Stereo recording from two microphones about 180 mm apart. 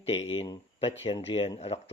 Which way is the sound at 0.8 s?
35° left (ahead or behind).